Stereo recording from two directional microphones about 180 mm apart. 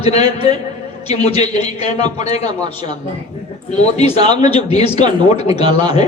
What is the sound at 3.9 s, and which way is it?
A man's voice, 35° left (ahead or behind).